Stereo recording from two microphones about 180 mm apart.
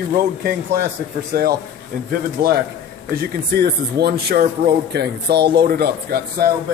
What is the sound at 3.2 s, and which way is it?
Speech, 65° right (ahead or behind).